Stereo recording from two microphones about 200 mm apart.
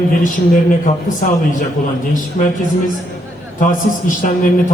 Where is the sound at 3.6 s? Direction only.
40° left (ahead or behind).